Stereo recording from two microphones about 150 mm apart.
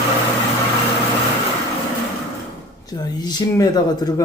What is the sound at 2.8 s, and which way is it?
Speech, 25° left (ahead or behind).